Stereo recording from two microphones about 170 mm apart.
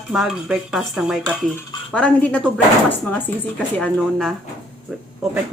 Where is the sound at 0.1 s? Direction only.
Centre (ahead or behind).